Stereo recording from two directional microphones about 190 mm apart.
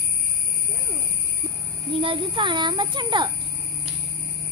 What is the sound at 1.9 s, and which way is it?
A child's voice, 30° right (ahead or behind).